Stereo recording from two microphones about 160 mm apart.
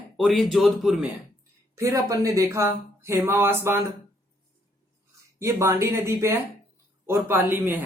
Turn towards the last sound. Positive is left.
turn(degrees=-10)  # may be behind; listen again after turning